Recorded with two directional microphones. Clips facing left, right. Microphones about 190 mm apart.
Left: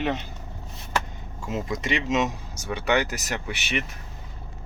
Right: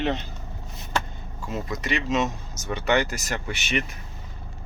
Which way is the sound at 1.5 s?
20° left (ahead or behind).